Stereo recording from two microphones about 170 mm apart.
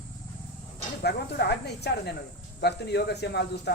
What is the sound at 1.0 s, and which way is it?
Speech, 75° left (ahead or behind).